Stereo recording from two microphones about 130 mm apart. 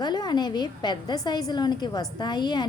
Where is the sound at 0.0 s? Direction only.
35° left (ahead or behind).